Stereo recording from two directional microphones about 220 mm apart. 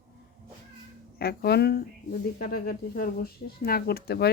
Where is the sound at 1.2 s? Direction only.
45° left (ahead or behind).